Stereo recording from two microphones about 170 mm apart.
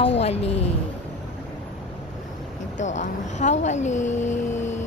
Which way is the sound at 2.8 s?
45° left (ahead or behind).